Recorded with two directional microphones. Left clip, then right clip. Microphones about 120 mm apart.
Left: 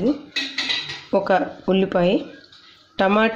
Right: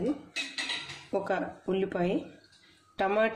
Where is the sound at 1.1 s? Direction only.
85° left.